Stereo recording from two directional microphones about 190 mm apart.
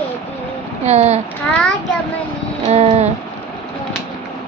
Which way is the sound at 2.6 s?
35° right (ahead or behind).